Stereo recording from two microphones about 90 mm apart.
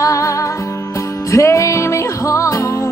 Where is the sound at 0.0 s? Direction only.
35° left (ahead or behind).